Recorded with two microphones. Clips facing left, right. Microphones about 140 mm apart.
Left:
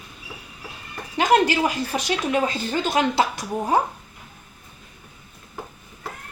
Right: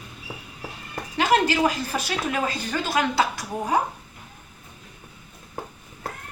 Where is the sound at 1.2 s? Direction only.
15° left (ahead or behind).